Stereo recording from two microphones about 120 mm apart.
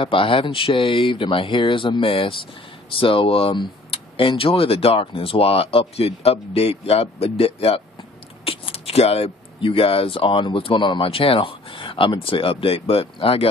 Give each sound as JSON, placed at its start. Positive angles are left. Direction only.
{"t": 0.0, "sound": "speech", "side_deg": 45}